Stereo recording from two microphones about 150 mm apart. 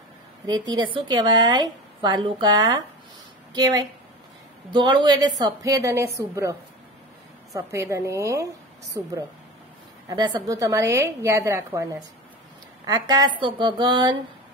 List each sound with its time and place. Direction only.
0.5 s a woman's voice: 25° right (ahead or behind)
7.5 s a woman's voice: 20° right (ahead or behind)
10.0 s a woman's voice: 25° right (ahead or behind)
13.4 s a sound: 30° right (ahead or behind)